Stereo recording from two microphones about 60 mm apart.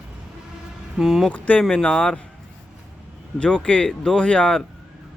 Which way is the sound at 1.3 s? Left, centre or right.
Left.